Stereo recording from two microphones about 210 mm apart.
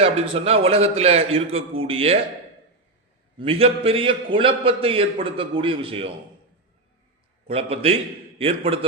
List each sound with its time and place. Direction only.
0.0 s a man's voice: 30° right (ahead or behind)
3.3 s a man's voice: 25° right (ahead or behind)
7.4 s a man's voice: 30° right (ahead or behind)